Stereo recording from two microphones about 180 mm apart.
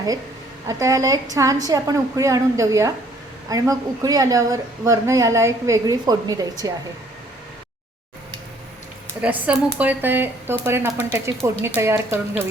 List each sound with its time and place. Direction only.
0.7 s a woman's voice: 15° right (ahead or behind)
9.2 s speech: 10° right (ahead or behind)